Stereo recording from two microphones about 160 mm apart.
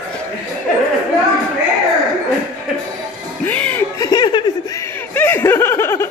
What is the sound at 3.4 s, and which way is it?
Music, 10° left (ahead or behind).